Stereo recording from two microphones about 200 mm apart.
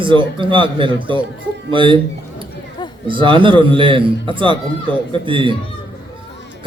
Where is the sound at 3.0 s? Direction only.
25° right (ahead or behind).